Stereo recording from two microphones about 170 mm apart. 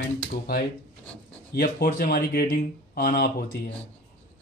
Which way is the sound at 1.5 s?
65° left (ahead or behind).